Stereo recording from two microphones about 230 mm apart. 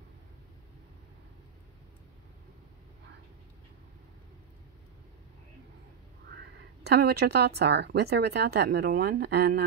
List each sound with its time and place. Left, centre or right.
6.3 s speech: right